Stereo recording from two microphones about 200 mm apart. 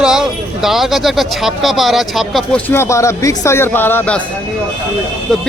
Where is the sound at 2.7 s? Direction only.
15° left (ahead or behind).